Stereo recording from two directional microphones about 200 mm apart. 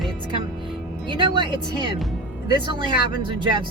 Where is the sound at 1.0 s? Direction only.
25° right (ahead or behind).